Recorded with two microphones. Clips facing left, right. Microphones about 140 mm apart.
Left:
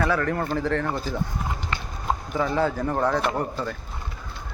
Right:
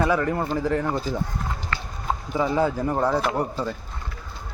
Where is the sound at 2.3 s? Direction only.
10° right (ahead or behind).